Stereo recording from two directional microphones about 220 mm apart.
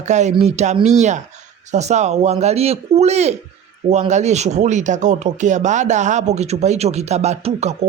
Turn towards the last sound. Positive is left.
turn(degrees=-30)  # may be behind; listen again after turning